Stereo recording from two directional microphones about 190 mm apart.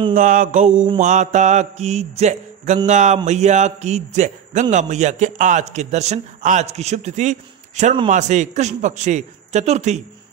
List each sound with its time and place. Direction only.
0.1 s mantra: 45° right (ahead or behind)
0.9 s a man's voice: 40° right (ahead or behind)